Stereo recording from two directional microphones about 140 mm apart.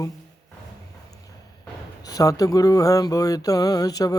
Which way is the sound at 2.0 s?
25° left (ahead or behind).